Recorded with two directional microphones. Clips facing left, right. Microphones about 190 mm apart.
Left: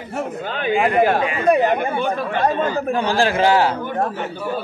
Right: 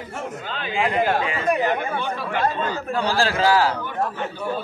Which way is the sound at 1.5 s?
55° left (ahead or behind).